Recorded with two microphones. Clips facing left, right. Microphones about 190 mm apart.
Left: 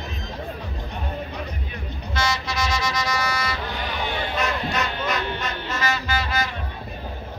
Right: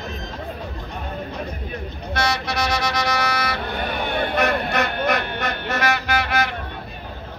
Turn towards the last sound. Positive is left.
turn(degrees=-65)  # may be behind; listen again after turning